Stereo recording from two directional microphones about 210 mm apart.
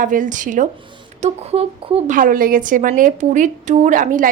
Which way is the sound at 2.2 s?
40° right (ahead or behind).